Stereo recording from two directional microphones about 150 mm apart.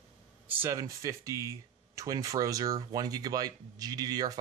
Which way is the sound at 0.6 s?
20° right (ahead or behind).